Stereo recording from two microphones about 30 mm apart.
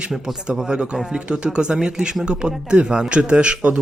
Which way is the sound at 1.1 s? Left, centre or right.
Right.